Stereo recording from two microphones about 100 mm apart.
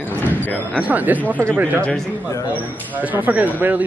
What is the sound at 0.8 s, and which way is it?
Speech, 15° right (ahead or behind).